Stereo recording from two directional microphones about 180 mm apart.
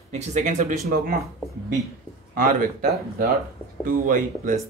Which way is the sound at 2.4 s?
50° right (ahead or behind).